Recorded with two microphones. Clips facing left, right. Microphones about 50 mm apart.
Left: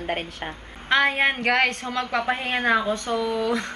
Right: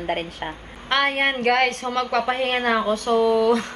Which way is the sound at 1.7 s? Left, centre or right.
Right.